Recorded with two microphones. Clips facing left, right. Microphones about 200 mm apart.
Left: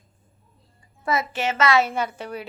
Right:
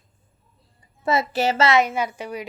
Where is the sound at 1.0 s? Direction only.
30° right (ahead or behind).